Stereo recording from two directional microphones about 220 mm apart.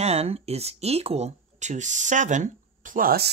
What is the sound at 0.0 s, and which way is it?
Speech, 30° right (ahead or behind).